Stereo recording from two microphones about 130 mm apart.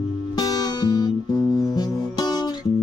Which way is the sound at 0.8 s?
30° left (ahead or behind).